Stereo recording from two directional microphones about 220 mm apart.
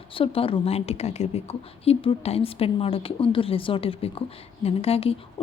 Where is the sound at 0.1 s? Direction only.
25° left (ahead or behind).